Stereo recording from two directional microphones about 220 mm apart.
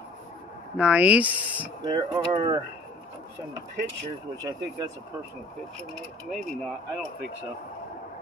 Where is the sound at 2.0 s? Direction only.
20° right (ahead or behind).